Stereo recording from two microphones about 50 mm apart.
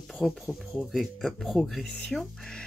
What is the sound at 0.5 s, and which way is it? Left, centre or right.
Speech, centre.